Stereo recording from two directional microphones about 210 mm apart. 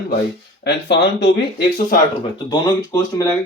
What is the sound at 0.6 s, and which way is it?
Speech, 55° left (ahead or behind).